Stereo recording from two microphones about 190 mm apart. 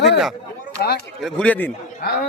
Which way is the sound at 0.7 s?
60° left (ahead or behind).